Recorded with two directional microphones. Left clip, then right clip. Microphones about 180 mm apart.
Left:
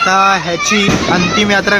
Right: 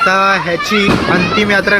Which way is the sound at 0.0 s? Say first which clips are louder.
Even; 10° left (ahead or behind).